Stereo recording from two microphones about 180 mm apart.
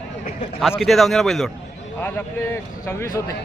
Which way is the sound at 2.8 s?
15° left (ahead or behind).